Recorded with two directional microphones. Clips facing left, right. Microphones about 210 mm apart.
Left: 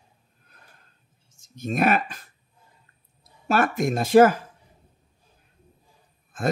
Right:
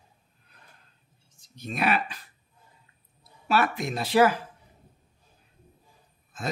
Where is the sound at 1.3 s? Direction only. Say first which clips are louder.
Left 7 dB; 45° left (ahead or behind).